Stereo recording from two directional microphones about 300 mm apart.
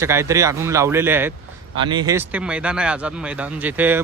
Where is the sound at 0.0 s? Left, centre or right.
Centre.